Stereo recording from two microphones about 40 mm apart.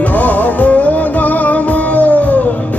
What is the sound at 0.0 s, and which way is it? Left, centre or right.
Music, left.